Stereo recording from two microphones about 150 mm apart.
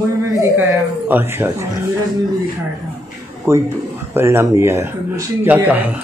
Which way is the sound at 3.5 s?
20° right (ahead or behind).